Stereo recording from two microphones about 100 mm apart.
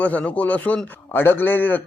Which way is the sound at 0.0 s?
15° left (ahead or behind).